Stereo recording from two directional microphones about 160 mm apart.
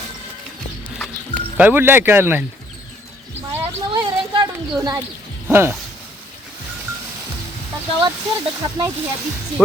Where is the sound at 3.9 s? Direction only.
25° right (ahead or behind).